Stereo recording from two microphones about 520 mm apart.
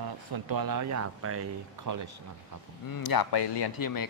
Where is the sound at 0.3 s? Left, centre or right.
Right.